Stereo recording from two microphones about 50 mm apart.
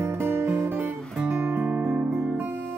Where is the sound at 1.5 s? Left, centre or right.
Right.